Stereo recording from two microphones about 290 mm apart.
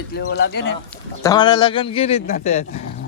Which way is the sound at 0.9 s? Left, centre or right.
Centre.